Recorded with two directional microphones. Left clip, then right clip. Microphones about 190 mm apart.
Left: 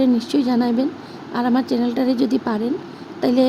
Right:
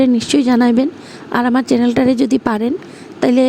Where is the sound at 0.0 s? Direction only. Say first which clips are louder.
Right 5 dB; 50° right (ahead or behind).